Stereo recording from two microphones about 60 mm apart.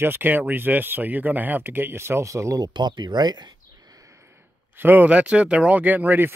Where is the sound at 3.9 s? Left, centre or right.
Right.